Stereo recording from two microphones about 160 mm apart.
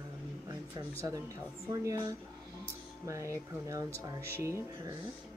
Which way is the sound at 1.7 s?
20° right (ahead or behind).